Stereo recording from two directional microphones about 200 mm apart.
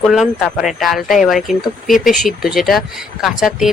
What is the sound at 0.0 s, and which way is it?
Speech, centre (ahead or behind).